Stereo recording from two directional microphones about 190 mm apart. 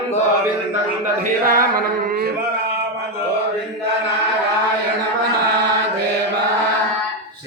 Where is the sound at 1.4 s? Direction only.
50° right (ahead or behind).